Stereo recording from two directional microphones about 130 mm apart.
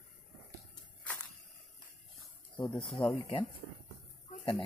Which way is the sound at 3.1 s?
40° left (ahead or behind).